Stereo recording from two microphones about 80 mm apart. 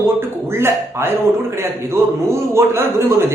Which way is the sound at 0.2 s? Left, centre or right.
Right.